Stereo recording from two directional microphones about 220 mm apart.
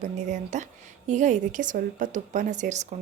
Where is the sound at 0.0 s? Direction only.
30° right (ahead or behind).